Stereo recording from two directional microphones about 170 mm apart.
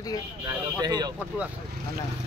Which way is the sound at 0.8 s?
25° right (ahead or behind).